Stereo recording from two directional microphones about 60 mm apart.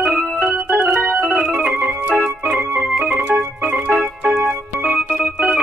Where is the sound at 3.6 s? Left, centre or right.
Right.